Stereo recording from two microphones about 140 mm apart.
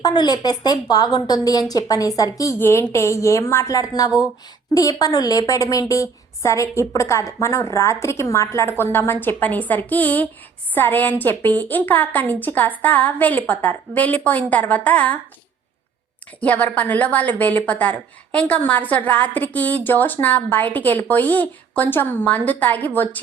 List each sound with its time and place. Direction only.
0.0 s a woman's voice: 30° left (ahead or behind); by 15.2 s 10° left (ahead or behind)
16.4 s a woman's voice: 10° left (ahead or behind)